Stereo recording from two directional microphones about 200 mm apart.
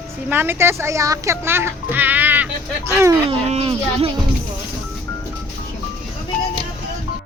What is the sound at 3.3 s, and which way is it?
Speech, 30° right (ahead or behind).